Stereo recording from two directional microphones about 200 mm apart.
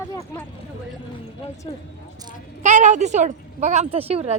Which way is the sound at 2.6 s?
35° right (ahead or behind).